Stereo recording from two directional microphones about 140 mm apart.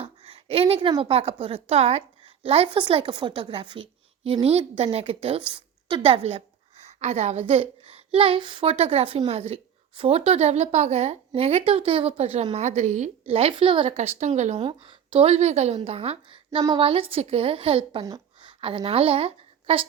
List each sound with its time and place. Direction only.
0.0 s a sound: 45° right (ahead or behind)
1.0 s a woman's voice: 45° right (ahead or behind)
13.9 s a woman's voice: 50° right (ahead or behind)
14.6 s a woman's voice: 40° right (ahead or behind)